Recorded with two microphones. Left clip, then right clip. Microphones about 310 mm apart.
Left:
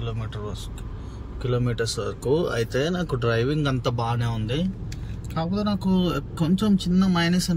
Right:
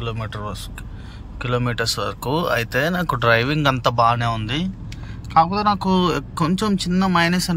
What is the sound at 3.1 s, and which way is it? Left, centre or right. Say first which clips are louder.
Speech: right 9 dB; right.